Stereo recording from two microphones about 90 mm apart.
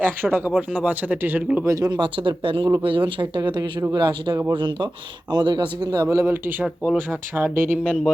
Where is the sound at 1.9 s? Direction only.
60° right (ahead or behind); by 2.7 s 80° right.